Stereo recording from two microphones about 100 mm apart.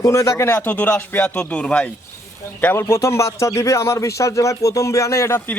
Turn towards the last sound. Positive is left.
turn(degrees=25)  # may be behind; listen again after turning